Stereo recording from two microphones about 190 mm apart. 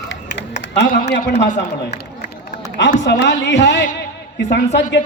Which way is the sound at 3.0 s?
70° left (ahead or behind).